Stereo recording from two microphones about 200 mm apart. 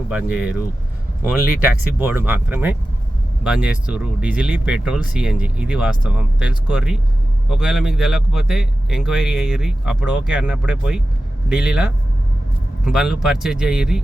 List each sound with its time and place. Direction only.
0.1 s speech: 5° right (ahead or behind)